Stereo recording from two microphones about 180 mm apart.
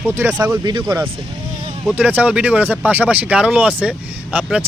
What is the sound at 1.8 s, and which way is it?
Speech, 10° right (ahead or behind).